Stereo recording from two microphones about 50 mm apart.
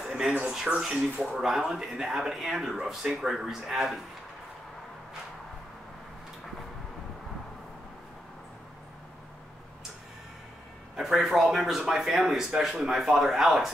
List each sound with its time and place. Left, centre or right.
0.1 s a sound: centre
0.7 s speech: centre
11.0 s speech: centre